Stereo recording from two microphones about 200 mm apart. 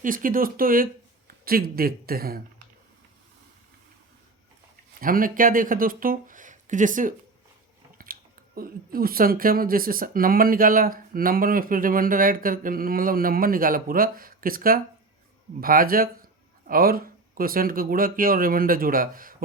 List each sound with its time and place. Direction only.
0.0 s speech: 45° right (ahead or behind)
4.9 s speech: 45° right (ahead or behind)